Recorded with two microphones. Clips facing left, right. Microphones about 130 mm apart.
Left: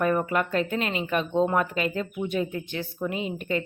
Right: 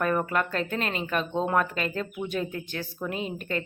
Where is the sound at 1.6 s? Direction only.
10° left (ahead or behind).